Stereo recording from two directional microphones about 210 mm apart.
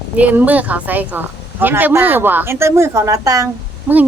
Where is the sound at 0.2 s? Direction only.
5° right (ahead or behind).